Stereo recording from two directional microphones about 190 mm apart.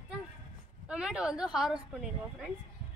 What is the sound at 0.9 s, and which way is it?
Speech, 5° right (ahead or behind).